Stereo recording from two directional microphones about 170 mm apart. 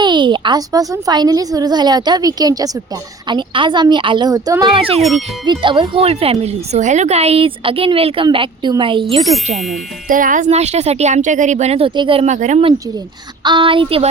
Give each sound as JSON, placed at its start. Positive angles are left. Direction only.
{"t": 0.0, "sound": "speech", "side_deg": -25}
{"t": 4.9, "sound": "speech", "side_deg": 0}
{"t": 5.5, "sound": "speech", "side_deg": -30}
{"t": 10.1, "sound": "speech", "side_deg": -50}
{"t": 13.4, "sound": "speech", "side_deg": -30}